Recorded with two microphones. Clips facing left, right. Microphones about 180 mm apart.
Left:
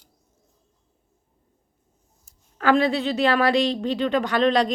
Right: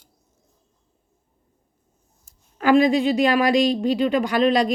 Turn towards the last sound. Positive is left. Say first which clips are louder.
# right 1 dB
turn(degrees=-10)  # may be behind; listen again after turning